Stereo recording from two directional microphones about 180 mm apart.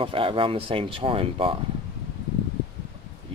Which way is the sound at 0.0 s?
30° right (ahead or behind).